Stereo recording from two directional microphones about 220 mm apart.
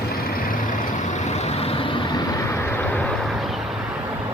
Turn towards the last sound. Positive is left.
turn(degrees=10)  # may be behind; listen again after turning